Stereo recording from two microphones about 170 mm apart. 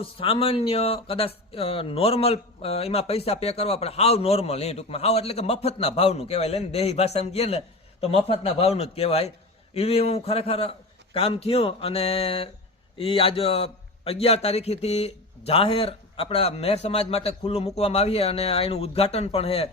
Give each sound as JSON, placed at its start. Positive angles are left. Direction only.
{"t": 0.0, "sound": "speech", "side_deg": 35}